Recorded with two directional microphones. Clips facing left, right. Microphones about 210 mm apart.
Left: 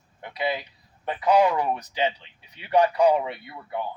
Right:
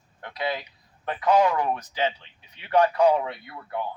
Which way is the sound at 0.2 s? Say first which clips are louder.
Left 2 dB; 5° left (ahead or behind).